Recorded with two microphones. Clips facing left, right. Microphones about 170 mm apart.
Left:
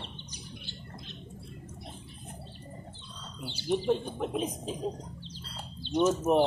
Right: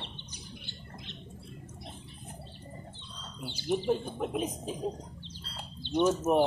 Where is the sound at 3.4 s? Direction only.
10° right (ahead or behind).